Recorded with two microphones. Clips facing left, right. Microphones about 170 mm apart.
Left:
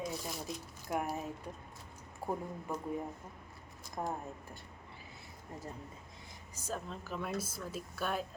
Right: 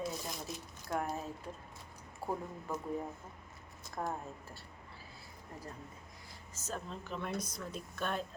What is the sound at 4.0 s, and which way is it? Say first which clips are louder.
Speech: even; 10° left (ahead or behind).